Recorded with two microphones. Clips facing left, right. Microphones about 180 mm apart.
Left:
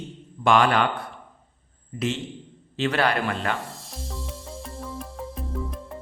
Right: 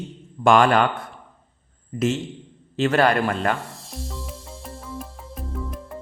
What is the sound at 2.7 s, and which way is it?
Speech, 45° right (ahead or behind).